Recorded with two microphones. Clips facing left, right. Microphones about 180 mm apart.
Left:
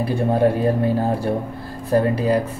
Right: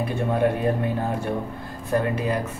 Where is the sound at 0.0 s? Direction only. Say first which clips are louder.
Left 4 dB; 35° left (ahead or behind).